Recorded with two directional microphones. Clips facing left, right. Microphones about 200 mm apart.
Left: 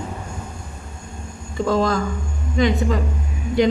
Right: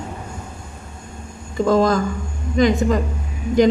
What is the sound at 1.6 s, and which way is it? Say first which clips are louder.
A woman's voice: right 3 dB; 45° right (ahead or behind).